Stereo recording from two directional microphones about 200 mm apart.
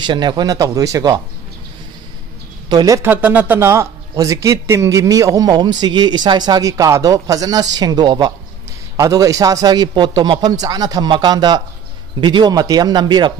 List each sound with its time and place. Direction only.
0.0 s a man's voice: 20° right (ahead or behind)
2.7 s a man's voice: 15° right (ahead or behind)